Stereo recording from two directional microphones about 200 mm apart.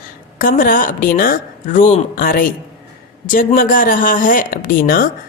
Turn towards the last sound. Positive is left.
turn(degrees=45)  # may be behind; listen again after turning